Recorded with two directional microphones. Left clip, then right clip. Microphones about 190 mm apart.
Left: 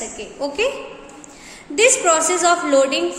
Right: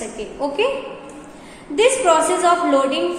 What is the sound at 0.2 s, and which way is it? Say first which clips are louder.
Speech: right 1 dB; 15° left (ahead or behind).